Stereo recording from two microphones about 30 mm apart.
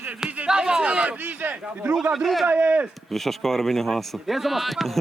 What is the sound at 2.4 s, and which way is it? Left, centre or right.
Speech, right.